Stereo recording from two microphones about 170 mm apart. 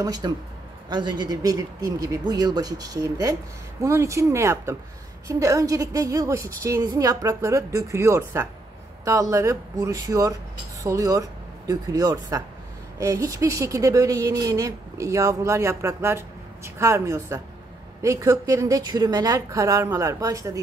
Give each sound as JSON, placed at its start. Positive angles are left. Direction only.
{"t": 0.0, "sound": "speech", "side_deg": -25}